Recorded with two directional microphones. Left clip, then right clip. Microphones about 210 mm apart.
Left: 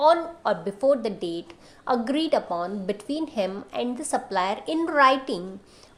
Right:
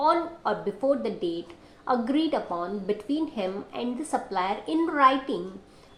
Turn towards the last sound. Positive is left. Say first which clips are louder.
# left 2 dB
turn(degrees=40)  # may be behind; listen again after turning